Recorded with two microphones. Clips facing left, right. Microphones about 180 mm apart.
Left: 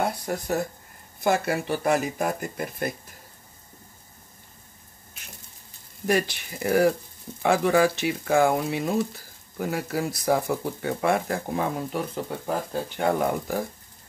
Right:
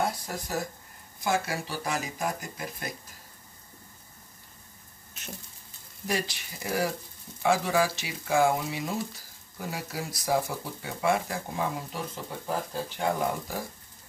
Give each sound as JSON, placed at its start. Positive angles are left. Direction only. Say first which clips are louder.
{"t": 0.0, "sound": "a sound", "louder": "left 4 dB", "side_deg": 60}
{"t": 1.2, "sound": "speech", "louder": "left 5 dB", "side_deg": 60}
{"t": 6.0, "sound": "speech", "louder": "left 7 dB", "side_deg": 60}